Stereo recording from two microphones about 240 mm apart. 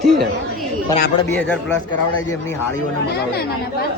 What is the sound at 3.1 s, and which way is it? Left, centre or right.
Speech, left.